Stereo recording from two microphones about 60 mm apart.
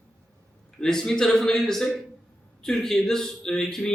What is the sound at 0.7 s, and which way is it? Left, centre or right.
Speech, centre.